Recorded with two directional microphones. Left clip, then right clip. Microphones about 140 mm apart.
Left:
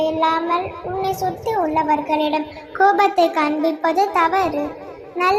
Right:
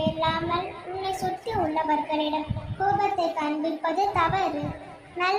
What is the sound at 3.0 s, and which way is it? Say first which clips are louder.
A child's voice: left 9 dB; 50° left (ahead or behind).